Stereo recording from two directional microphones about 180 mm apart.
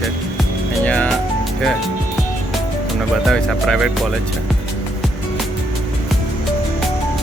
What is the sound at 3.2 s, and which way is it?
Speech, centre (ahead or behind).